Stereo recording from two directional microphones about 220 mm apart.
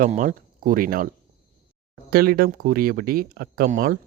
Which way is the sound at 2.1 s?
40° right (ahead or behind).